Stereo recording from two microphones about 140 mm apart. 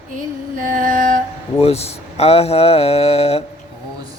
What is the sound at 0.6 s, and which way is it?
Music, 70° right (ahead or behind).